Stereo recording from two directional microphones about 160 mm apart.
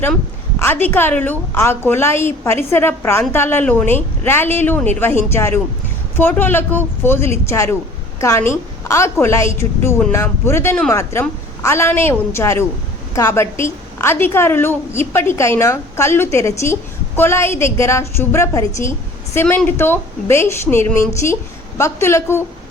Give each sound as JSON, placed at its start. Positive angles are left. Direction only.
{"t": 0.6, "sound": "a woman's voice", "side_deg": 10}